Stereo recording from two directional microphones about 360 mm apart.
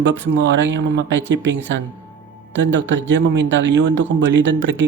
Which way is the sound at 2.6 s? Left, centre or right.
Right.